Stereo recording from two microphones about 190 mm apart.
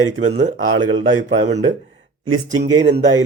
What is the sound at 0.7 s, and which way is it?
Speech, 90° right.